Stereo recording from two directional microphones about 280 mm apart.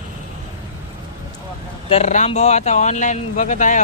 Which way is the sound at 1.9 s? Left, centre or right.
Left.